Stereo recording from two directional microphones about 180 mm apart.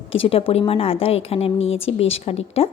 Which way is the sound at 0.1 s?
30° left (ahead or behind).